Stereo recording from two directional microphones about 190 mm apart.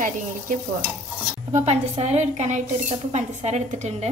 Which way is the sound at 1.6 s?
35° right (ahead or behind).